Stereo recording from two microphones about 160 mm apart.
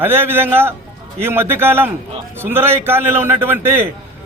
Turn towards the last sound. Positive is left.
turn(degrees=-15)  # may be behind; listen again after turning